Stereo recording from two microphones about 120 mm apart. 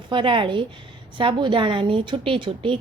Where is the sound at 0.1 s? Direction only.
45° right (ahead or behind).